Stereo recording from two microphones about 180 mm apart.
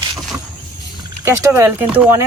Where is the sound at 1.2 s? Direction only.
15° right (ahead or behind).